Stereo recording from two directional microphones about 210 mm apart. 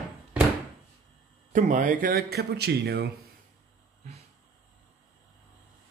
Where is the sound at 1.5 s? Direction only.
40° right (ahead or behind).